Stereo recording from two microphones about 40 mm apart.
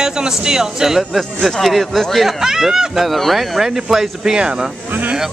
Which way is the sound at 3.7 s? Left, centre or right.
Centre.